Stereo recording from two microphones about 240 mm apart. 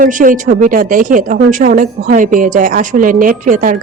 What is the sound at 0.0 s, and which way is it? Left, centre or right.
Speech, right.